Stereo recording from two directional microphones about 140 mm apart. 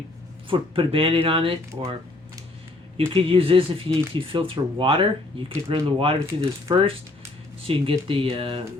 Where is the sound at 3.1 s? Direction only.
40° right (ahead or behind).